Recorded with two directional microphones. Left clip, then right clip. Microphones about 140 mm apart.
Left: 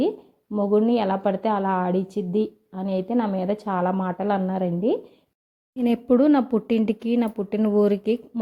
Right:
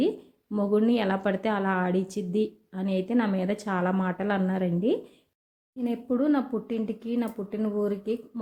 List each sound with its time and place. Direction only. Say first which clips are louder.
0.5 s a woman's voice: left 4 dB; 15° left (ahead or behind)
5.8 s speech: left 8 dB; 70° left (ahead or behind)